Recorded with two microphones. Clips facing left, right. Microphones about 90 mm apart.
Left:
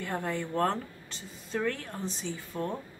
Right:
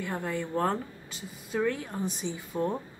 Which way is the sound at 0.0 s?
Centre (ahead or behind).